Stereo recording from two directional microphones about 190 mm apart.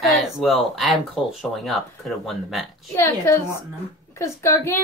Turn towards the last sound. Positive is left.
turn(degrees=15)  # may be behind; listen again after turning